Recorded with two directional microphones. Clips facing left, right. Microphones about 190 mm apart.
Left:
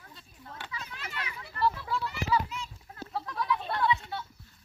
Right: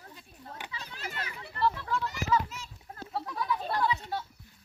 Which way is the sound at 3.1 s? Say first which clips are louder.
Left 1 dB; centre (ahead or behind).